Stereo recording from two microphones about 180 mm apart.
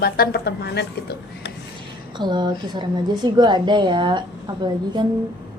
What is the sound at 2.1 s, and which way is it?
A woman's voice, 25° right (ahead or behind).